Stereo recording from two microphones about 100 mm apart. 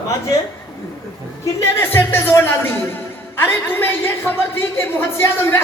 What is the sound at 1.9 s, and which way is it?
Speech, 25° left (ahead or behind).